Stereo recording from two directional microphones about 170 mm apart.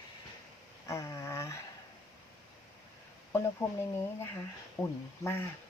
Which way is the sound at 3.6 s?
15° left (ahead or behind).